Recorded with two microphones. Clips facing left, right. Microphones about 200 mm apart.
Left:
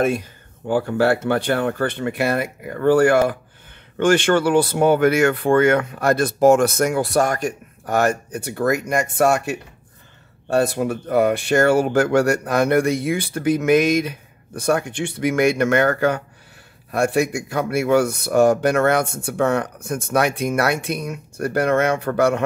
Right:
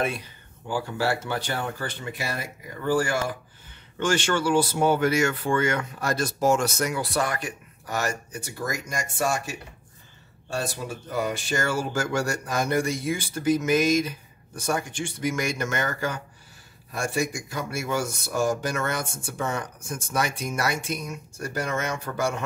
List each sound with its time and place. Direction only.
0.0 s speech: 45° left (ahead or behind); by 22.4 s 60° left (ahead or behind)